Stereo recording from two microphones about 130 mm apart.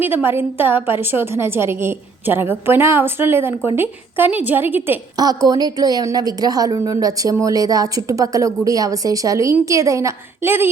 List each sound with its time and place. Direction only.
0.0 s a woman's voice: 15° right (ahead or behind)
5.1 s a woman's voice: 30° right (ahead or behind)